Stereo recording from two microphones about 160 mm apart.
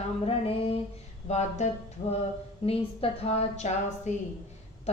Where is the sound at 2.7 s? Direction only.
40° left (ahead or behind).